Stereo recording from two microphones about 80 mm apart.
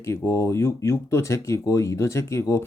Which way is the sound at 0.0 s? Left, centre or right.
Left.